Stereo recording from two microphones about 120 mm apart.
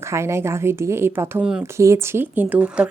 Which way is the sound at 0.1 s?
25° right (ahead or behind).